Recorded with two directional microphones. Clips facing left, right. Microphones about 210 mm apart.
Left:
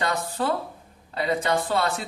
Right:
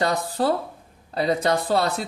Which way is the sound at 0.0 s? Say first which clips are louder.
Right 4 dB; 35° right (ahead or behind).